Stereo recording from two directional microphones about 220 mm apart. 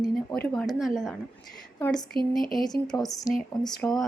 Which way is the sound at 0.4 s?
5° left (ahead or behind).